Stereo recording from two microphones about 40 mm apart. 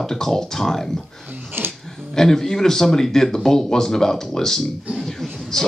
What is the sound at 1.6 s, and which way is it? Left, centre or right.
Music, right.